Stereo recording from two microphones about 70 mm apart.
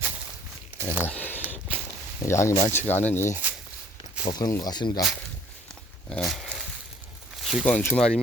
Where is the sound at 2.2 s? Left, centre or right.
Left.